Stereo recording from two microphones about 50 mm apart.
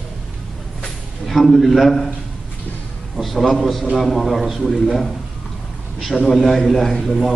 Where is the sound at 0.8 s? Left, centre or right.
Centre.